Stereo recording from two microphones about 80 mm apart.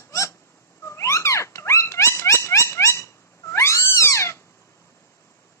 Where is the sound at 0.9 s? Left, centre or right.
Left.